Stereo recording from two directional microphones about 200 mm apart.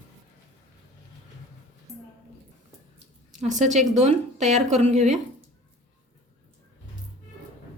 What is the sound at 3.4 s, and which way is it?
Speech, 35° right (ahead or behind).